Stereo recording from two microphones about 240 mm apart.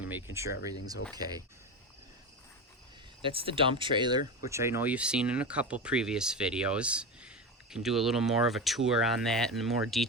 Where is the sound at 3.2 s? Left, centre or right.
Right.